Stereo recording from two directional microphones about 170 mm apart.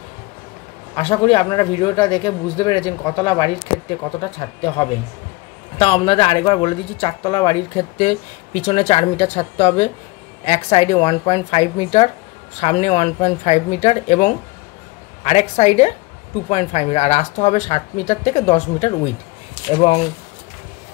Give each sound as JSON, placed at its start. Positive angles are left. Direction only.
{"t": 0.9, "sound": "speech", "side_deg": 35}
{"t": 19.6, "sound": "speech", "side_deg": 25}